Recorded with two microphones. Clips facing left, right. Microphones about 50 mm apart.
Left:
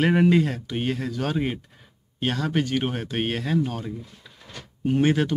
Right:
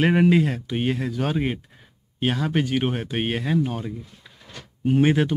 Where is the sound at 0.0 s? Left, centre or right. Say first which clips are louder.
Right 1 dB; centre.